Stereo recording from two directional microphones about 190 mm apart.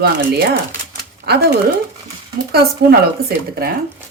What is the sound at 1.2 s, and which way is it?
Speech, 45° right (ahead or behind).